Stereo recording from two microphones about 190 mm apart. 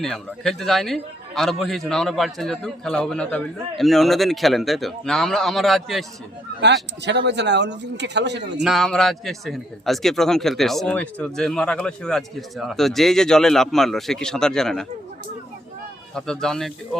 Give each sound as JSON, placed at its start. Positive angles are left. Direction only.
{"t": 0.0, "sound": "a man's voice", "side_deg": 0}
{"t": 7.0, "sound": "a man's voice", "side_deg": -65}
{"t": 8.6, "sound": "a man's voice", "side_deg": 0}
{"t": 16.1, "sound": "a man's voice", "side_deg": 5}